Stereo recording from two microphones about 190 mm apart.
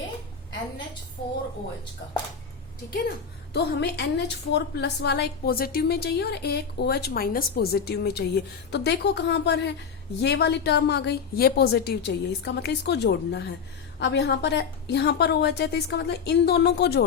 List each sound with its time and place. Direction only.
3.5 s a woman's voice: 60° left (ahead or behind)